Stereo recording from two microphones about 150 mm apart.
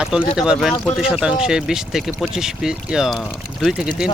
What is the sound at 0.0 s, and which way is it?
Speech, 5° right (ahead or behind).